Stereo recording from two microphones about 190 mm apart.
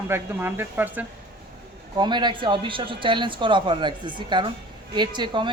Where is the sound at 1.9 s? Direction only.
25° right (ahead or behind).